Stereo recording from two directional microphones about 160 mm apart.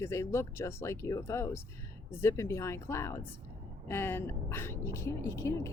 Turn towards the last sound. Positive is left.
turn(degrees=20)  # may be behind; listen again after turning